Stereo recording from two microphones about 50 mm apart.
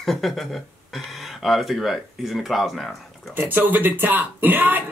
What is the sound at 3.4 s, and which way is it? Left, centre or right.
Speech, right.